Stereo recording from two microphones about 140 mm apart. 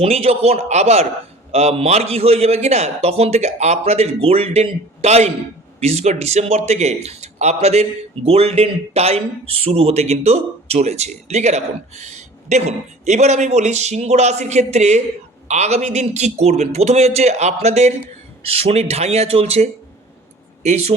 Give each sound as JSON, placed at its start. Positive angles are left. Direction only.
{"t": 0.0, "sound": "a man's voice", "side_deg": -45}